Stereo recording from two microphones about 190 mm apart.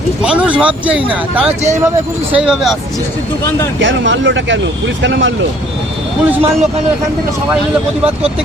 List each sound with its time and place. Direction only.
0.2 s speech: 5° right (ahead or behind)
1.5 s speech: 35° right (ahead or behind)
2.3 s speech: centre (ahead or behind)
3.8 s speech: 75° right (ahead or behind)
6.2 s speech: 10° right (ahead or behind)